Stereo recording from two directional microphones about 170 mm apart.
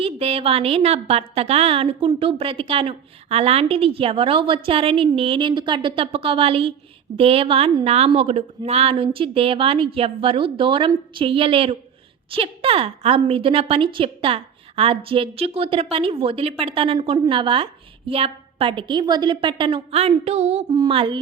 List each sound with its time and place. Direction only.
0.0 s a woman's voice: 35° right (ahead or behind)
20.7 s music: 25° right (ahead or behind)